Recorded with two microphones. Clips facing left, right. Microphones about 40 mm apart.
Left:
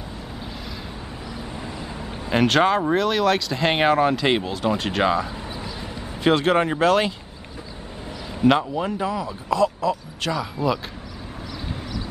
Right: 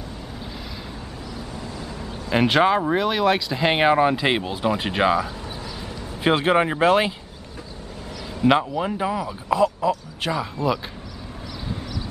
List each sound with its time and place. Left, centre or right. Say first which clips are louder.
1.3 s vehicle: left 1 dB; left
2.3 s speech: even; centre
8.5 s speech: even; centre